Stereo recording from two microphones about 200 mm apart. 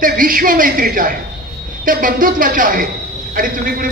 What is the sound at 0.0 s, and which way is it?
Speech, 45° right (ahead or behind).